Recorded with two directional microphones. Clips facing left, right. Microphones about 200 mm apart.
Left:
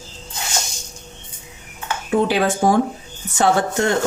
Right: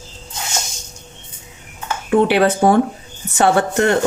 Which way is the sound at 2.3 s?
65° right (ahead or behind).